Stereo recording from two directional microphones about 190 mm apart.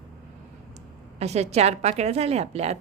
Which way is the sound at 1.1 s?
35° right (ahead or behind).